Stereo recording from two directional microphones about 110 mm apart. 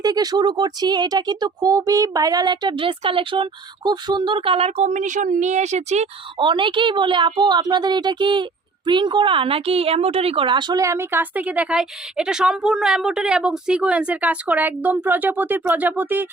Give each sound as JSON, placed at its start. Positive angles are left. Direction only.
{"t": 0.0, "sound": "speech", "side_deg": -35}
{"t": 5.4, "sound": "speech", "side_deg": -90}
{"t": 6.4, "sound": "a woman's voice", "side_deg": -50}
{"t": 10.8, "sound": "a woman's voice", "side_deg": -25}